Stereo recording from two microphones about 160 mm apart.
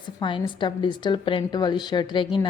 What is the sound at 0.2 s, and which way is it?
Speech, 30° left (ahead or behind).